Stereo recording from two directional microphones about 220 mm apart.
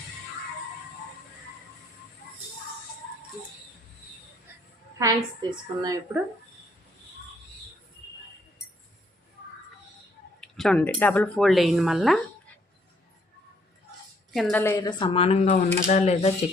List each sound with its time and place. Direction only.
4.9 s a woman's voice: 15° right (ahead or behind)
10.4 s speech: centre (ahead or behind)
14.3 s speech: centre (ahead or behind)
14.6 s speech: 15° left (ahead or behind); by 16.3 s 30° left (ahead or behind)